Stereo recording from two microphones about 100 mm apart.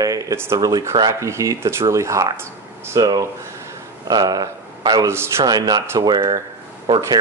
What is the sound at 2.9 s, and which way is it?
Speech, 40° right (ahead or behind).